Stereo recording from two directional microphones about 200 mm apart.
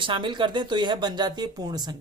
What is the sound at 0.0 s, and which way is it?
Speech, 25° right (ahead or behind).